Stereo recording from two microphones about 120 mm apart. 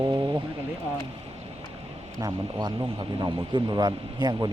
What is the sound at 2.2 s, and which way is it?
Speech, 30° right (ahead or behind).